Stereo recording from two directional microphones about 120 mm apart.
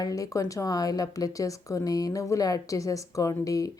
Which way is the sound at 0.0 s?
30° left (ahead or behind).